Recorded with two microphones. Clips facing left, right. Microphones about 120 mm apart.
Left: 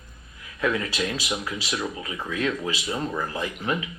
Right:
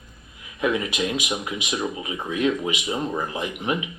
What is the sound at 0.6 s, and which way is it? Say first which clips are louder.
Speech: right 2 dB; 15° right (ahead or behind).